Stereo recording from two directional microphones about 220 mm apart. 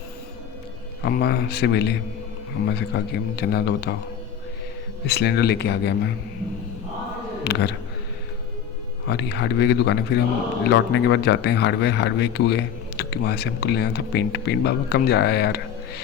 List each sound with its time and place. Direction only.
1.0 s speech: 50° left (ahead or behind)
5.0 s speech: 50° left (ahead or behind)
7.4 s a man's voice: 50° left (ahead or behind)
9.0 s speech: 50° left (ahead or behind)